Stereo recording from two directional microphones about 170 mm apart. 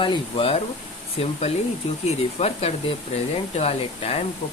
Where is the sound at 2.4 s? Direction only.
35° left (ahead or behind).